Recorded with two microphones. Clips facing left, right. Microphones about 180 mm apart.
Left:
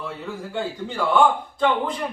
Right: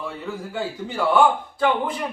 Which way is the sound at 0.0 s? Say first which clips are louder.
Right 1 dB; centre (ahead or behind).